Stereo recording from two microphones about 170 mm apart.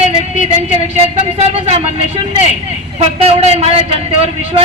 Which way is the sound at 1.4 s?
35° right (ahead or behind).